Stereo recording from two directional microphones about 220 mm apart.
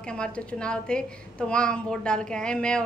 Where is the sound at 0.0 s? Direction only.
5° left (ahead or behind).